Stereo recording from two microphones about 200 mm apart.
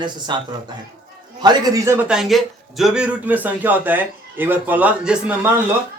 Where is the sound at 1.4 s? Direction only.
20° right (ahead or behind).